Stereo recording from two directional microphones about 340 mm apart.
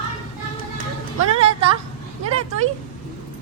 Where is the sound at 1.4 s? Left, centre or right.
Centre.